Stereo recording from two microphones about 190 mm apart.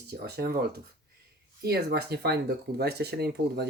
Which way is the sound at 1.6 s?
60° right (ahead or behind).